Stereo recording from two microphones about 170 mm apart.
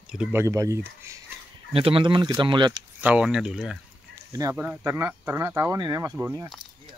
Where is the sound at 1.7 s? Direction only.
35° right (ahead or behind).